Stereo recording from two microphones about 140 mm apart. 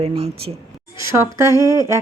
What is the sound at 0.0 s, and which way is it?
Speech, 45° right (ahead or behind).